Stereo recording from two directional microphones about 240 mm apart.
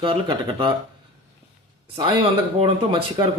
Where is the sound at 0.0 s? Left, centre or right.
Right.